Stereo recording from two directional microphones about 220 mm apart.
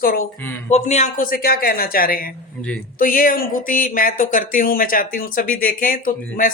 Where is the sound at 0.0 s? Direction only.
40° left (ahead or behind).